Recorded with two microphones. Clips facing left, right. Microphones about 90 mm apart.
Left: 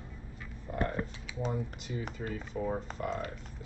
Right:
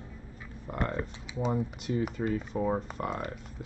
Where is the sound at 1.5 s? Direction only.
50° right (ahead or behind).